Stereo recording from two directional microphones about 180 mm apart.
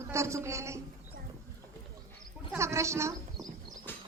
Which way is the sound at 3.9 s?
10° left (ahead or behind).